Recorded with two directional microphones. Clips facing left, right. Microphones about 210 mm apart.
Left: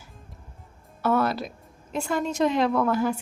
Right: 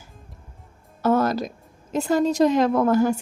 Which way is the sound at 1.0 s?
45° right (ahead or behind).